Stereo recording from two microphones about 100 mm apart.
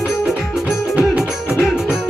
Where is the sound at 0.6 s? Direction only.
10° right (ahead or behind).